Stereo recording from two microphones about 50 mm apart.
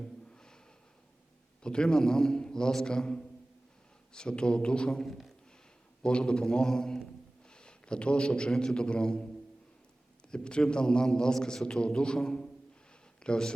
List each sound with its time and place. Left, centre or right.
0.0 s a sound: centre
1.6 s a man's voice: centre
5.0 s speech: centre
6.0 s a man's voice: centre
10.3 s a man's voice: centre